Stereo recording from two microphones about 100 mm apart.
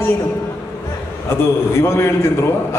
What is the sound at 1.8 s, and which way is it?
Speech, 25° left (ahead or behind).